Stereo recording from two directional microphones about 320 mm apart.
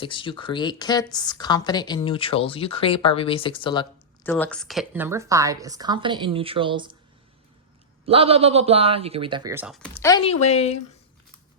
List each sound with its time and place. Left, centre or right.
0.0 s a woman's voice: centre
8.0 s speech: centre